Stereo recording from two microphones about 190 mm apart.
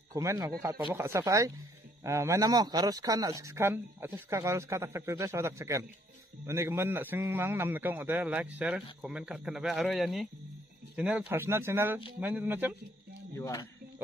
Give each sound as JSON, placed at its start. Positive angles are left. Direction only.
{"t": 0.1, "sound": "a man's voice", "side_deg": -15}
{"t": 13.4, "sound": "speech", "side_deg": 20}